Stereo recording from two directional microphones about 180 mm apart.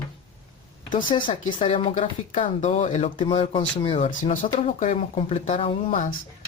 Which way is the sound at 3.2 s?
30° left (ahead or behind).